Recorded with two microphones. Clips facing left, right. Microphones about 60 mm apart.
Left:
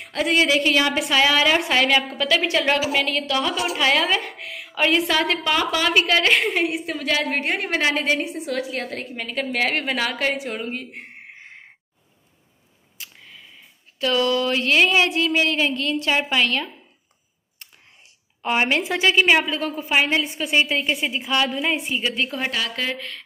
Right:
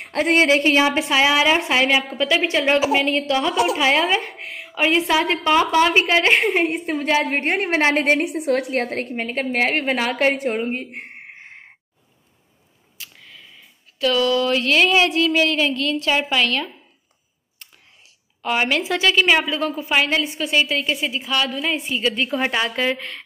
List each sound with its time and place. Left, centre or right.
0.0 s a woman's voice: right
4.7 s a woman's voice: centre
7.3 s a woman's voice: right
9.1 s a woman's voice: right
10.1 s a woman's voice: right
13.2 s a sound: centre
14.0 s speech: centre
18.4 s speech: centre
19.3 s a woman's voice: centre
20.5 s a woman's voice: left
21.8 s speech: centre
22.1 s a woman's voice: centre
22.4 s a woman's voice: right